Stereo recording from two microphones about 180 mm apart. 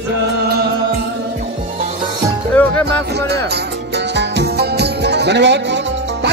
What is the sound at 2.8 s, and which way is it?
Music, 65° right (ahead or behind).